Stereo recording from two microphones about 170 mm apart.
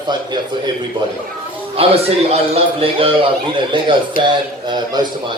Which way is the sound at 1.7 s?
35° right (ahead or behind).